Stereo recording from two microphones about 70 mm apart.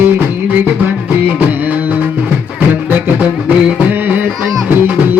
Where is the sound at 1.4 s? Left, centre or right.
Right.